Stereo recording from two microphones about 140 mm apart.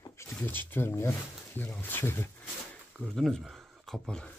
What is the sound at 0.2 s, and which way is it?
Speech, 15° left (ahead or behind).